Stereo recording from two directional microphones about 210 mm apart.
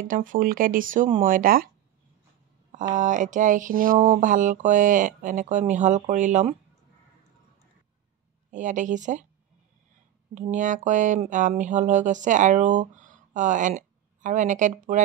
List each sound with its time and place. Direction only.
0.0 s speech: 40° right (ahead or behind)
2.9 s speech: 35° right (ahead or behind)
8.5 s speech: 35° right (ahead or behind)
10.3 s speech: 35° right (ahead or behind)